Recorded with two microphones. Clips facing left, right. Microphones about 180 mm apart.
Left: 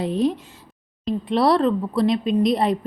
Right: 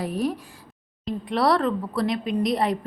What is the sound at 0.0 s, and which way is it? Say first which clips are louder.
A woman's voice: left 5 dB; 25° left (ahead or behind).